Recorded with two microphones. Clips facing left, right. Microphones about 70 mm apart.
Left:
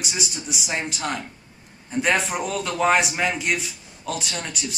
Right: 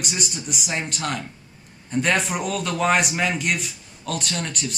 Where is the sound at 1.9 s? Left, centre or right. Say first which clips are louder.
Even; centre.